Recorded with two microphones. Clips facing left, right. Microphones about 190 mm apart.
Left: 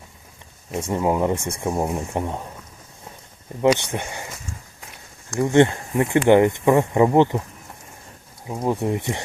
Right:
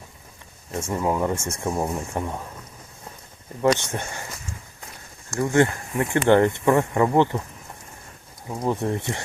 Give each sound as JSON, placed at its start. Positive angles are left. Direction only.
{"t": 0.7, "sound": "speech", "side_deg": 20}
{"t": 3.7, "sound": "speech", "side_deg": 15}
{"t": 5.4, "sound": "speech", "side_deg": 20}
{"t": 8.4, "sound": "speech", "side_deg": 10}